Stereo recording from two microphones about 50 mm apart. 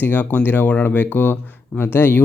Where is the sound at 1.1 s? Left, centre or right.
Left.